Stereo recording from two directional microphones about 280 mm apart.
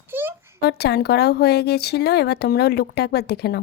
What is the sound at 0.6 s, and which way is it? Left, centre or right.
Speech, left.